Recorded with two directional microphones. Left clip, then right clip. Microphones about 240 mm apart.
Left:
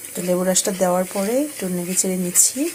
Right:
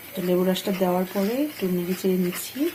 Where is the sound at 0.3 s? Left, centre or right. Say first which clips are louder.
Left 4 dB; left.